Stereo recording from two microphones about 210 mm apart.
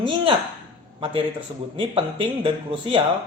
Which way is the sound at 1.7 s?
25° right (ahead or behind).